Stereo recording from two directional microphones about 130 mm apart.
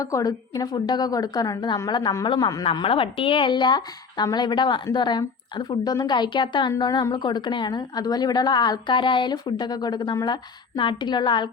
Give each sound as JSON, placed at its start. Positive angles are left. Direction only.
{"t": 0.0, "sound": "a woman's voice", "side_deg": 25}
{"t": 2.6, "sound": "a woman's voice", "side_deg": 45}